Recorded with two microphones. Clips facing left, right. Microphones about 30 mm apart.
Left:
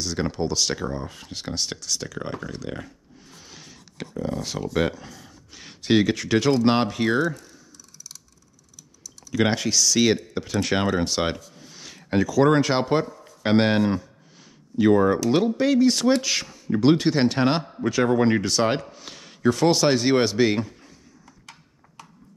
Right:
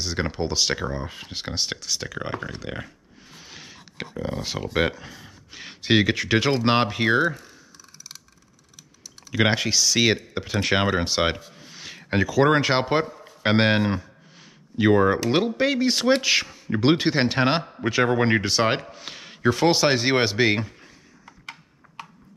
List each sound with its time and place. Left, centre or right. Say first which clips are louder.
0.0 s speech: left 1 dB; centre
9.0 s speech: right 1 dB; right
21.3 s a sound: right 9 dB; right